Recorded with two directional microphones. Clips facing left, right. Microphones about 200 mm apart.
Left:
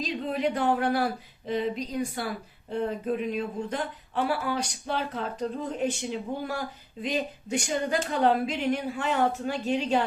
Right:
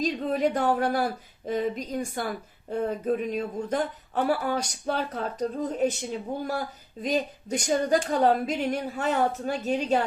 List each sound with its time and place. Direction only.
0.0 s a woman's voice: 45° right (ahead or behind)